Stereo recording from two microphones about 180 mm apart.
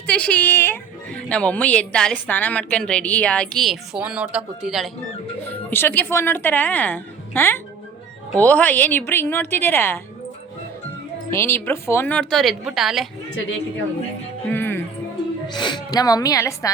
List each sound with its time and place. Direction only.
0.1 s a woman's voice: 10° left (ahead or behind)
5.5 s a woman's voice: 10° left (ahead or behind)
11.3 s a woman's voice: 15° left (ahead or behind); by 13.1 s centre (ahead or behind)
14.5 s music: 10° left (ahead or behind)
15.5 s a woman's voice: 25° left (ahead or behind)